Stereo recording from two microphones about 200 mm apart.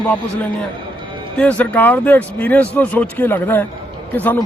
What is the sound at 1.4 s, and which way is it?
A man's voice, 5° left (ahead or behind).